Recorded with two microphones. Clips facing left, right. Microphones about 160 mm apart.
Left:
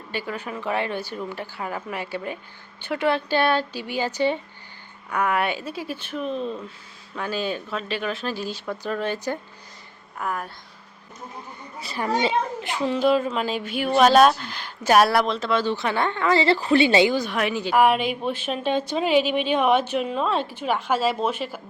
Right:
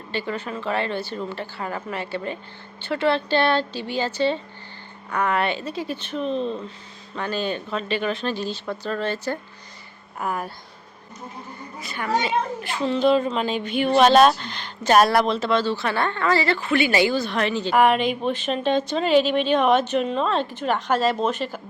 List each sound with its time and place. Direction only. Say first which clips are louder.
0.1 s a woman's voice: right 2 dB; 10° left (ahead or behind)
10.2 s speech: right 2 dB; 5° right (ahead or behind)
11.8 s a child's voice: left 1 dB; 30° left (ahead or behind)
12.6 s speech: right 1 dB; 15° left (ahead or behind)
15.5 s a woman's voice: left 2 dB; 15° left (ahead or behind)
16.6 s a woman's voice: left 3 dB; 30° left (ahead or behind); by 21.6 s 10° left (ahead or behind)